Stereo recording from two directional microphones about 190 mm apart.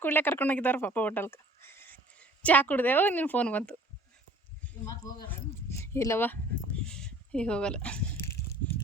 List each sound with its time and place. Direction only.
0.0 s speech: 10° left (ahead or behind)
4.9 s speech: 20° left (ahead or behind)
5.3 s a sound: 15° left (ahead or behind)